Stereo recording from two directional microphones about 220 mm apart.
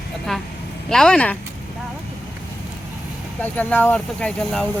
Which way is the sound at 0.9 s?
5° left (ahead or behind).